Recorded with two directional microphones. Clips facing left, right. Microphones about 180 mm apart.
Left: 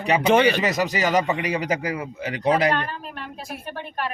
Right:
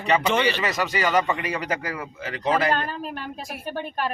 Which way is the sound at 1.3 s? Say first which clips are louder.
Left 3 dB; 15° left (ahead or behind).